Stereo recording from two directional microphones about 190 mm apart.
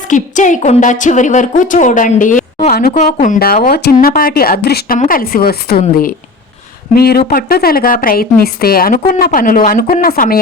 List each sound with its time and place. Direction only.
0.1 s a woman's voice: 40° left (ahead or behind)
2.7 s a woman's voice: 55° left (ahead or behind)
3.0 s a woman's voice: 40° left (ahead or behind)